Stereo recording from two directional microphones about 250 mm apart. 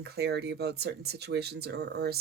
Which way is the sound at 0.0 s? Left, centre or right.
Right.